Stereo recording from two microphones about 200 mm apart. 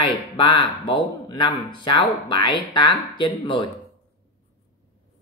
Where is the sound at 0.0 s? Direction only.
25° left (ahead or behind).